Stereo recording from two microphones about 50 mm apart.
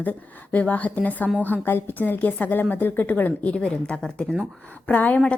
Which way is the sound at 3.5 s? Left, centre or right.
Left.